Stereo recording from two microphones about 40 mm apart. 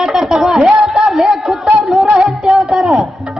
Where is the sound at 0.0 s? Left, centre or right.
Centre.